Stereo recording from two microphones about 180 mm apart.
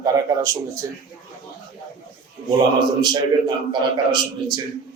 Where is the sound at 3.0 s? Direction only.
25° right (ahead or behind).